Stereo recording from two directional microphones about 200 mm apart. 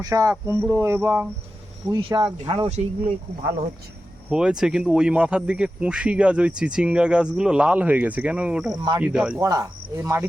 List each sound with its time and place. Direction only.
0.0 s speech: 15° right (ahead or behind)
1.9 s speech: 25° right (ahead or behind)
4.3 s speech: 5° right (ahead or behind)
8.7 s speech: 20° right (ahead or behind)
9.0 s speech: 5° right (ahead or behind)
9.4 s speech: 15° right (ahead or behind)